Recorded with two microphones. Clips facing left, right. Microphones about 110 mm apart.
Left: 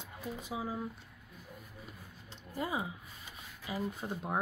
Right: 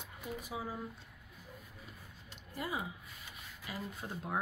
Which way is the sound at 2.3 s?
25° left (ahead or behind).